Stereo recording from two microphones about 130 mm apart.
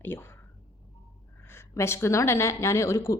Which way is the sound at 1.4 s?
20° left (ahead or behind).